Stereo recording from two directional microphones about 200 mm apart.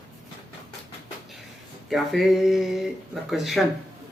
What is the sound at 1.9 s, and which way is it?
Speech, centre (ahead or behind).